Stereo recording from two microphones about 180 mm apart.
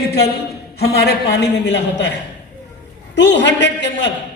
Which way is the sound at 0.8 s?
70° left (ahead or behind).